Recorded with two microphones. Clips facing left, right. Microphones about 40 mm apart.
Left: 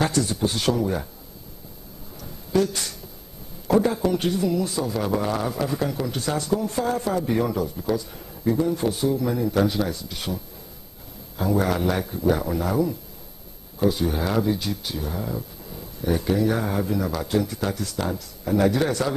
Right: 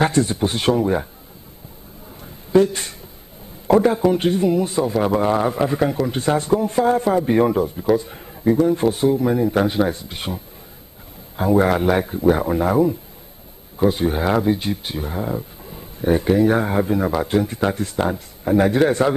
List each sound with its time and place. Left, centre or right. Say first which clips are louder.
0.0 s speech: right 5 dB; right
2.2 s a sound: right 7 dB; right
3.6 s speech: right 5 dB; right